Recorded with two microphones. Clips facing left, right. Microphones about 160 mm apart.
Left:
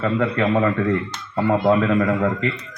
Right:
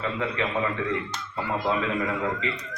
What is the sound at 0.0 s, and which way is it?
A man's voice, 50° left (ahead or behind).